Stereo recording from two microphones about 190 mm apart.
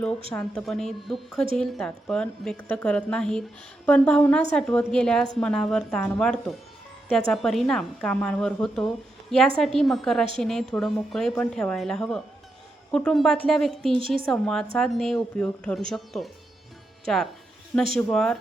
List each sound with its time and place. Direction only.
0.3 s a woman's voice: 5° left (ahead or behind)